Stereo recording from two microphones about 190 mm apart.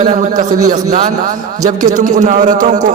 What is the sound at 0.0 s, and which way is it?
A man's voice, 45° right (ahead or behind).